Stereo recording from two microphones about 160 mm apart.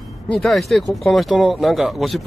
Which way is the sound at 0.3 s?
Centre (ahead or behind).